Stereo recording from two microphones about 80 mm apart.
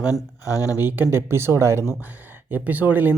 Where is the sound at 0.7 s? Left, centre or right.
Right.